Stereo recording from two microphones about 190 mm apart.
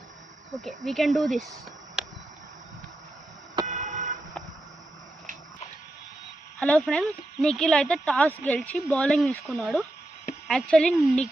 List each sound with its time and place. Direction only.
0.6 s speech: centre (ahead or behind)
2.0 s a sound: 5° right (ahead or behind)
3.7 s music: 40° right (ahead or behind)
6.6 s speech: 5° left (ahead or behind)